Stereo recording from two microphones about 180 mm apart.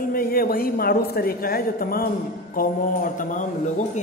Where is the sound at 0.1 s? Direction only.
55° left (ahead or behind).